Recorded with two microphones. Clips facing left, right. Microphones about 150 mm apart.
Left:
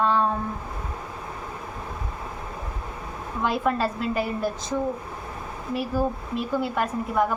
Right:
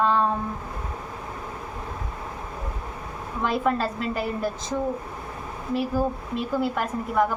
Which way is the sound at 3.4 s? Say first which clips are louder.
Even; centre (ahead or behind).